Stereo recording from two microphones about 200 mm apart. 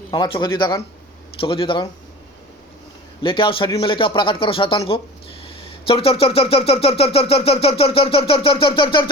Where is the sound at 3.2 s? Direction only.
25° left (ahead or behind).